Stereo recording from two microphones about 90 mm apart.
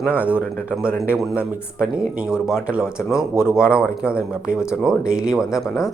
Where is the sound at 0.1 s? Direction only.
15° right (ahead or behind).